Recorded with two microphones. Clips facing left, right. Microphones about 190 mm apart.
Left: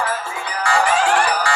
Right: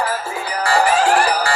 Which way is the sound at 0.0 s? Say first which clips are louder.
Right 2 dB; 35° right (ahead or behind).